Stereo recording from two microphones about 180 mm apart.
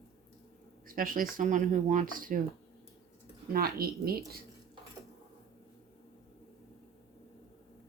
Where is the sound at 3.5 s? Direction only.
55° right (ahead or behind).